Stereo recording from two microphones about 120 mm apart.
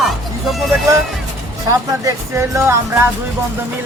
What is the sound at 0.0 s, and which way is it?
Music, centre (ahead or behind).